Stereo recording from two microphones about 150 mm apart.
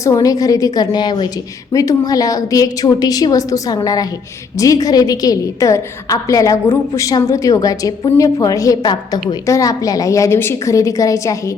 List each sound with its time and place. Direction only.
0.0 s a woman's voice: 20° left (ahead or behind)